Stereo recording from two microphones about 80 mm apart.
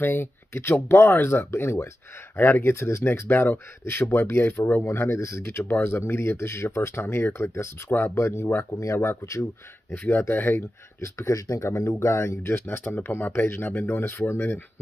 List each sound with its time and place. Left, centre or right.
0.0 s speech: left